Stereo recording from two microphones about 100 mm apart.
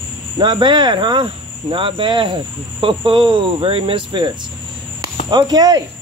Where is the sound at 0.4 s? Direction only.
50° right (ahead or behind).